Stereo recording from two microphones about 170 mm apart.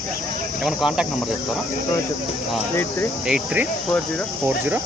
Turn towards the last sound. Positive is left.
turn(degrees=-5)  # may be behind; listen again after turning